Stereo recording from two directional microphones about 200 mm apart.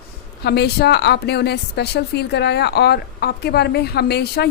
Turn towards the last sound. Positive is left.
turn(degrees=55)  # may be behind; listen again after turning